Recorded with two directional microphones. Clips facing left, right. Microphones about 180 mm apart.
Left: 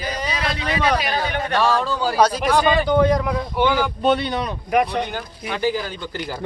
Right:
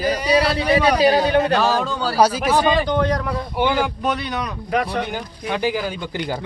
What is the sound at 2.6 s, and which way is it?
Speech, 10° left (ahead or behind).